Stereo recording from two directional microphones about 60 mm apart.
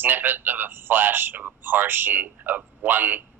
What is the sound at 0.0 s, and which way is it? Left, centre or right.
Speech, right.